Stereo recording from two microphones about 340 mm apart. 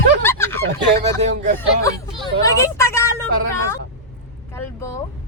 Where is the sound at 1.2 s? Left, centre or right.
Right.